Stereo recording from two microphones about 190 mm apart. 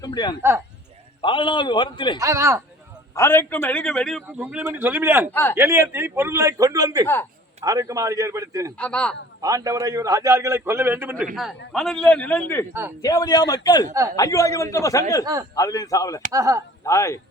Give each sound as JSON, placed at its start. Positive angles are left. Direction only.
{"t": 0.0, "sound": "a man's voice", "side_deg": 20}
{"t": 2.1, "sound": "a man's voice", "side_deg": -15}
{"t": 3.2, "sound": "a man's voice", "side_deg": 15}
{"t": 4.4, "sound": "a man's voice", "side_deg": -10}
{"t": 5.3, "sound": "a man's voice", "side_deg": 10}
{"t": 5.5, "sound": "a man's voice", "side_deg": -15}
{"t": 8.8, "sound": "a man's voice", "side_deg": 5}
{"t": 9.4, "sound": "a man's voice", "side_deg": -20}
{"t": 11.7, "sound": "a man's voice", "side_deg": 0}
{"t": 15.2, "sound": "a man's voice", "side_deg": -20}
{"t": 15.5, "sound": "a man's voice", "side_deg": 20}
{"t": 16.3, "sound": "a man's voice", "side_deg": -20}
{"t": 16.8, "sound": "a man's voice", "side_deg": 15}